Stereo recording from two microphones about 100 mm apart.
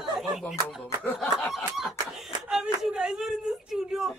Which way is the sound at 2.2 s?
5° right (ahead or behind).